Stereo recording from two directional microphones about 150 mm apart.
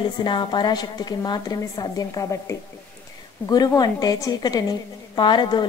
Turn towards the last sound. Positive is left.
turn(degrees=30)  # may be behind; listen again after turning